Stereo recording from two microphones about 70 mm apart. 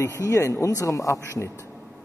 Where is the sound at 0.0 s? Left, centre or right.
Left.